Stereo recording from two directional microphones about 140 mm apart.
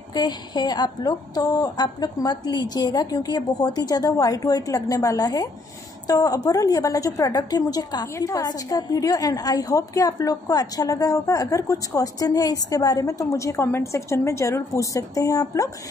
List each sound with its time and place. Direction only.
0.1 s a woman's voice: 30° left (ahead or behind)